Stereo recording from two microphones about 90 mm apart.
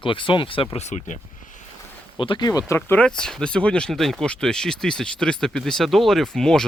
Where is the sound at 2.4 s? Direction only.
40° left (ahead or behind).